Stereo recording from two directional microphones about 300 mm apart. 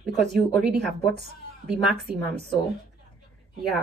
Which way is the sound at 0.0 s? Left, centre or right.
Centre.